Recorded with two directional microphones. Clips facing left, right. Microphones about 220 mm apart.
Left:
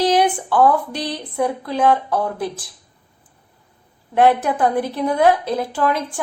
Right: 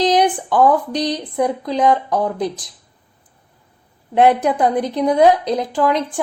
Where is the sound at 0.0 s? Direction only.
15° right (ahead or behind).